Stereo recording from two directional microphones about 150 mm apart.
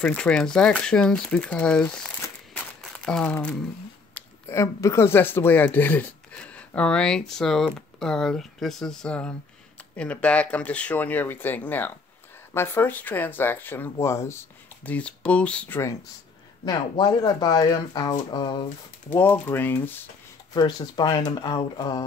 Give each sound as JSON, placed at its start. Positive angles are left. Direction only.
{"t": 0.0, "sound": "speech", "side_deg": 5}
{"t": 4.1, "sound": "speech", "side_deg": 20}
{"t": 16.6, "sound": "speech", "side_deg": 25}
{"t": 19.0, "sound": "speech", "side_deg": 15}
{"t": 20.5, "sound": "speech", "side_deg": 30}